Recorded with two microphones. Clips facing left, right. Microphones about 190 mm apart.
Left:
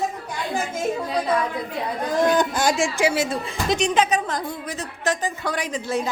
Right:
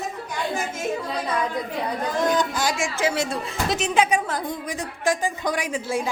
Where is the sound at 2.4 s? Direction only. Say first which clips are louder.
Left 3 dB; 50° left (ahead or behind).